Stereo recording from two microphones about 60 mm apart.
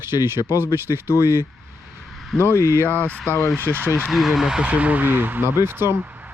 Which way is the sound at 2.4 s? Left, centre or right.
Left.